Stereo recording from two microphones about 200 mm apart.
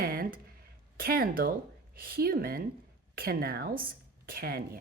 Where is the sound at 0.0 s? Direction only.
50° right (ahead or behind).